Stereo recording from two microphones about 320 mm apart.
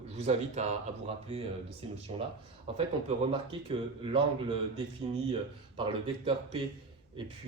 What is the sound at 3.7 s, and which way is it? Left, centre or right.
Speech, centre.